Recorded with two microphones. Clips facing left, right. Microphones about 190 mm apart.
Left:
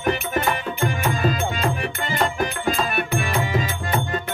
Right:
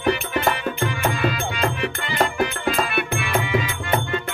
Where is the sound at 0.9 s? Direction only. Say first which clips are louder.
Even; 45° left (ahead or behind).